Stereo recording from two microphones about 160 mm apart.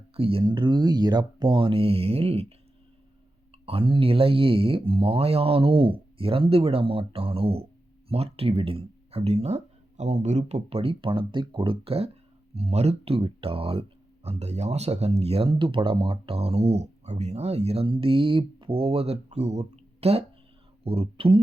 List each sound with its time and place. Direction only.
0.2 s speech: 35° right (ahead or behind)
3.7 s speech: 35° right (ahead or behind)